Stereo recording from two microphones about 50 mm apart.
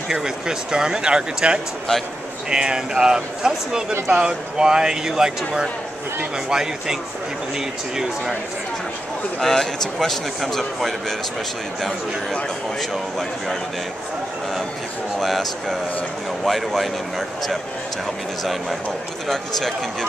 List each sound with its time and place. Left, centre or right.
0.1 s speech: centre
9.4 s a man's voice: centre
15.1 s a man's voice: centre
18.4 s a man's voice: centre